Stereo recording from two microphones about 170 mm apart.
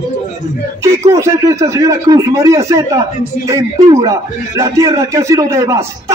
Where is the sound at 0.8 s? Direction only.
15° right (ahead or behind).